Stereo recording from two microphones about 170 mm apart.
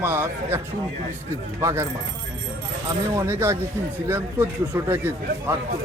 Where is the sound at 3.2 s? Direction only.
15° right (ahead or behind).